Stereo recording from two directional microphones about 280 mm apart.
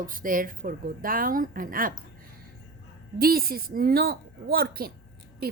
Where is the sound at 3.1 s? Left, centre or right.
Right.